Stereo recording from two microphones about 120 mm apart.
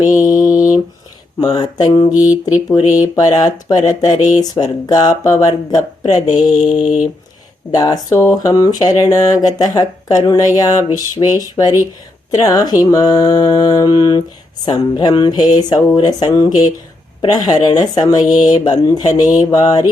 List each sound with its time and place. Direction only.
0.3 s mantra: 30° left (ahead or behind)
1.5 s speech: 35° left (ahead or behind)
6.8 s a sound: 5° right (ahead or behind)
7.7 s speech: 30° left (ahead or behind)